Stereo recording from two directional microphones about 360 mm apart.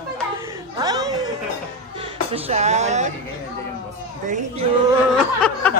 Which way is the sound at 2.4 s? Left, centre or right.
Centre.